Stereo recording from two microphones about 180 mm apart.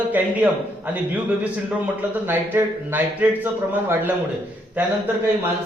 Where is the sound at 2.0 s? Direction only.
10° right (ahead or behind).